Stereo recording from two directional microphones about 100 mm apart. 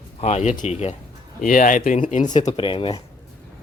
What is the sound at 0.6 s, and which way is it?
Speech, 90° left.